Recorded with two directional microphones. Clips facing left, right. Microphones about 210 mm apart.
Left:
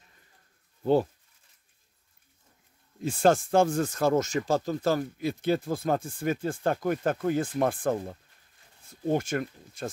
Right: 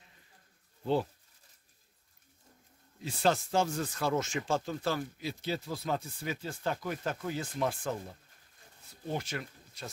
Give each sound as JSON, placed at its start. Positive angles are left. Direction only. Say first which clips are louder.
{"t": 3.0, "sound": "speech", "louder": "left 7 dB", "side_deg": 50}